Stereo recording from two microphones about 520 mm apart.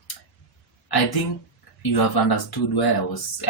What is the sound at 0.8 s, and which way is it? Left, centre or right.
Speech, left.